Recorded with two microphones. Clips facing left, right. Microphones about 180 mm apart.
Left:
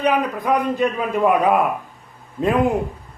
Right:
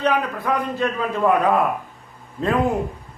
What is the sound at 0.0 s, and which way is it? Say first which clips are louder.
A man's voice: left 2 dB; 15° left (ahead or behind).